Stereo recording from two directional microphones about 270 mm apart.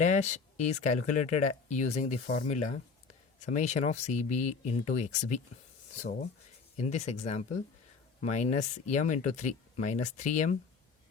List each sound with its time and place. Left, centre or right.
0.0 s speech: left